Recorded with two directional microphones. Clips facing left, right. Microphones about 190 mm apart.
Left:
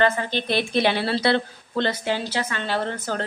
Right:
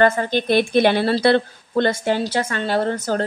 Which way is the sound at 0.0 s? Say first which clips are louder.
Right 5 dB; 50° right (ahead or behind).